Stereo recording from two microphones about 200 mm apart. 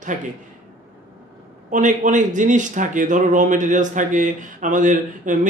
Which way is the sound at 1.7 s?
40° right (ahead or behind).